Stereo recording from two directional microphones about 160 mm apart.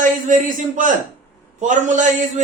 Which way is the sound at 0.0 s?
55° right (ahead or behind).